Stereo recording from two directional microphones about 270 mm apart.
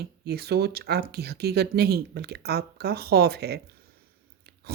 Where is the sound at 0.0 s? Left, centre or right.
Right.